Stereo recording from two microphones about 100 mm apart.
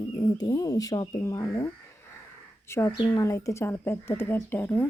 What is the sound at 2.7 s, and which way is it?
Speech, 25° left (ahead or behind).